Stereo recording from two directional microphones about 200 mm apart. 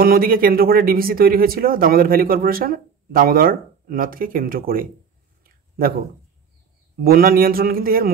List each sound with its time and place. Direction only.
0.0 s speech: 45° right (ahead or behind)
5.4 s a sound: 45° right (ahead or behind)
7.0 s speech: 45° right (ahead or behind)